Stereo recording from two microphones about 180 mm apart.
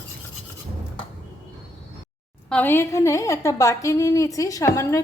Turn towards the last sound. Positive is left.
turn(degrees=15)  # may be behind; listen again after turning